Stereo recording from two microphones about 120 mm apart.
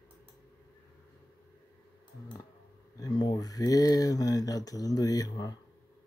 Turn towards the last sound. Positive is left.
turn(degrees=30)  # may be behind; listen again after turning